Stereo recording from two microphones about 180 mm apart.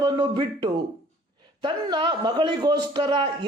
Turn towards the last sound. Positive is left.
turn(degrees=-25)  # may be behind; listen again after turning